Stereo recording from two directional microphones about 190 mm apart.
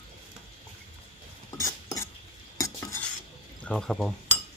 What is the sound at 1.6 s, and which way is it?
Cutlery, 20° left (ahead or behind).